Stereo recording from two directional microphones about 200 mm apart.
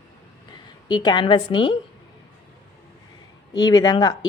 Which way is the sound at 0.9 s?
20° left (ahead or behind).